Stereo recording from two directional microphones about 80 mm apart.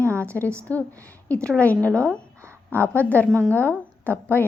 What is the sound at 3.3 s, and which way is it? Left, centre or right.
Speech, right.